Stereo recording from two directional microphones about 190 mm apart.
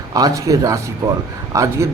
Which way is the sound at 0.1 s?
20° right (ahead or behind).